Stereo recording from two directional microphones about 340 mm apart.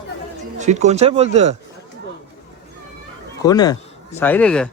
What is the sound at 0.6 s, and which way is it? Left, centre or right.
Speech, centre.